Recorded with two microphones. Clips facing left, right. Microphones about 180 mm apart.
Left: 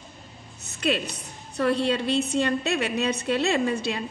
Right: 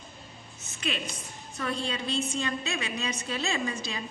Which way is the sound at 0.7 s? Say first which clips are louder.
Left 8 dB; 65° left (ahead or behind).